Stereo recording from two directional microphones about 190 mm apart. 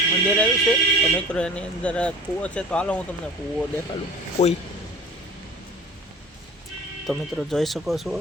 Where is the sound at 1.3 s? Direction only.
5° left (ahead or behind).